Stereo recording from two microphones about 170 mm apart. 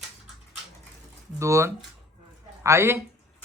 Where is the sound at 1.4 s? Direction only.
15° right (ahead or behind).